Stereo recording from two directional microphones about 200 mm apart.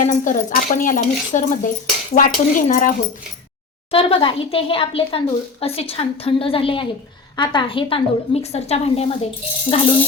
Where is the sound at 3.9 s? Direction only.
30° left (ahead or behind).